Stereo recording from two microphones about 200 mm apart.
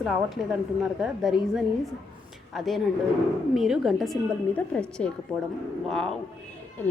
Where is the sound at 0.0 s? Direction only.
Centre (ahead or behind).